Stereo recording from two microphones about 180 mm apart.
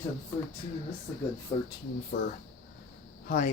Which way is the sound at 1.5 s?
20° left (ahead or behind).